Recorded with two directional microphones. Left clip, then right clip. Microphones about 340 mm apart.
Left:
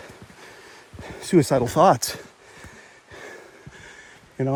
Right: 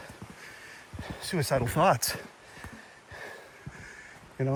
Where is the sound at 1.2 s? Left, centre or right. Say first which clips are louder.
Left 10 dB; centre.